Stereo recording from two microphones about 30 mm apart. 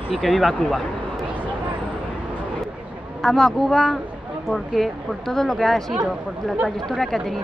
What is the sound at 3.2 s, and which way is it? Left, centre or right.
Speech, centre.